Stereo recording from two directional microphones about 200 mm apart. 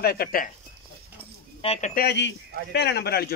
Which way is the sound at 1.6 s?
30° left (ahead or behind).